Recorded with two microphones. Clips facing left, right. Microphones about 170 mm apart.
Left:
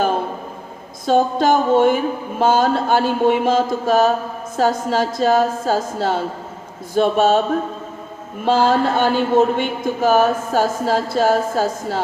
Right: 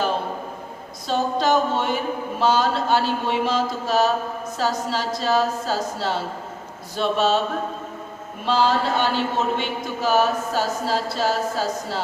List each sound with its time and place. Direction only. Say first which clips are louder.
1.0 s a man's voice: left 6 dB; 50° left (ahead or behind)
8.4 s a man's voice: left 5 dB; 50° left (ahead or behind)